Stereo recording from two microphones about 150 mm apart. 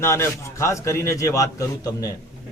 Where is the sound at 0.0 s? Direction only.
15° left (ahead or behind).